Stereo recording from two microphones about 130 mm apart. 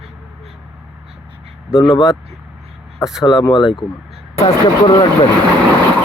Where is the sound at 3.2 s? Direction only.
35° left (ahead or behind).